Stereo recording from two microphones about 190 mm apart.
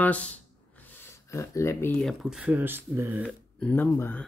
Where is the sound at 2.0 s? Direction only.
Centre (ahead or behind).